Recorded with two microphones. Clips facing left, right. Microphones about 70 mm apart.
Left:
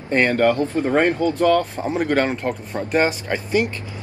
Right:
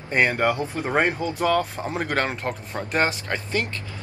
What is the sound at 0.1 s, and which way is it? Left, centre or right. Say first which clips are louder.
Speech: left 4 dB; centre.